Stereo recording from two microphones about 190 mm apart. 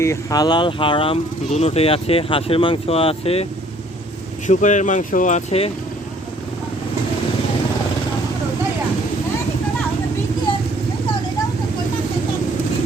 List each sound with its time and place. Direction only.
0.0 s speech: 15° left (ahead or behind)
4.4 s speech: 40° left (ahead or behind)